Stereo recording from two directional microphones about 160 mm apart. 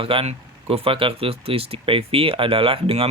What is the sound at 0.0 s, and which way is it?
Speech, 35° right (ahead or behind).